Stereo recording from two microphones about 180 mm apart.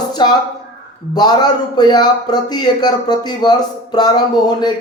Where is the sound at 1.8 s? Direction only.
25° left (ahead or behind).